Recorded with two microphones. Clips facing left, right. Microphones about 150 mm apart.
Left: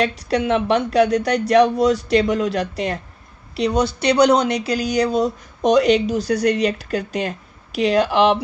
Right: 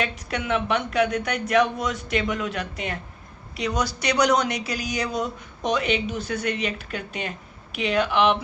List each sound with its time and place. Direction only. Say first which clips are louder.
0.0 s speech: left 9 dB; 35° left (ahead or behind)